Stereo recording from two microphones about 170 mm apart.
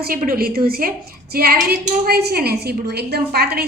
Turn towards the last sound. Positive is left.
turn(degrees=-70)  # may be behind; listen again after turning